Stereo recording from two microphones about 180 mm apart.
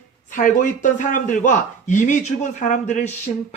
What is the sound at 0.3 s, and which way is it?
Speech, 45° left (ahead or behind).